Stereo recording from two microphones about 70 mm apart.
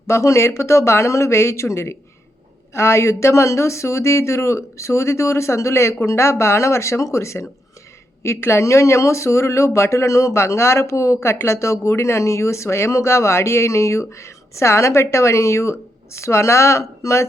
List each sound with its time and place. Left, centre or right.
0.1 s speech: left